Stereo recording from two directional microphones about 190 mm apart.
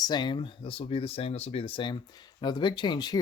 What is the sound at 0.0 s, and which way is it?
Speech, 25° left (ahead or behind).